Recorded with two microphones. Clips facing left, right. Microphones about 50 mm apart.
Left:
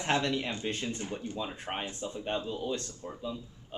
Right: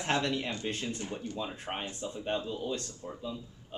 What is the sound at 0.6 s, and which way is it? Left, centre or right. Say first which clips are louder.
A man's voice: left 1 dB; centre.